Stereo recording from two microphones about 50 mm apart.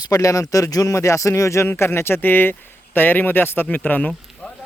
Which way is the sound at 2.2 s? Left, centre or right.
Left.